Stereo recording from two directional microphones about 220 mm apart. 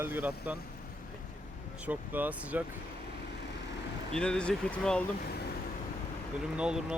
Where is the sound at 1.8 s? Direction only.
5° right (ahead or behind).